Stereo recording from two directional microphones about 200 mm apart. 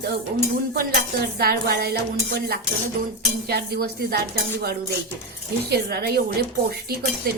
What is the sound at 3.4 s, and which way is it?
Speech, 50° right (ahead or behind).